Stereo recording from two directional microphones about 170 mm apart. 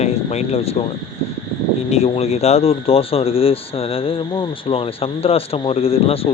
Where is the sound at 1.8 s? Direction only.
40° left (ahead or behind).